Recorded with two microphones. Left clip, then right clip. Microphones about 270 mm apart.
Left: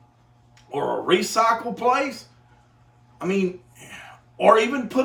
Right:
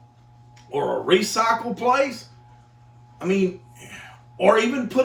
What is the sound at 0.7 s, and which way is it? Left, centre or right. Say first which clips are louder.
Speech: right 2 dB; centre.